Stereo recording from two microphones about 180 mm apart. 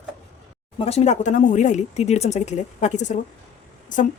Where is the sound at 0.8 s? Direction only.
35° left (ahead or behind).